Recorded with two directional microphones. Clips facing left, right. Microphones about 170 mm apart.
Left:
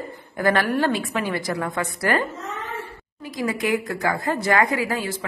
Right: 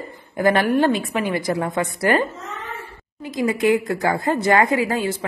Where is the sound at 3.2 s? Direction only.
25° right (ahead or behind).